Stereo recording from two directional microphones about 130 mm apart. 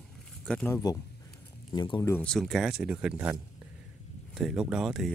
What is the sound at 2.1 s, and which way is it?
Speech, 5° left (ahead or behind).